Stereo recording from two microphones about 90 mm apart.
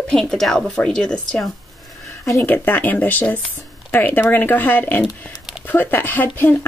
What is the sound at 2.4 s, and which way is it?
Speech, 20° left (ahead or behind).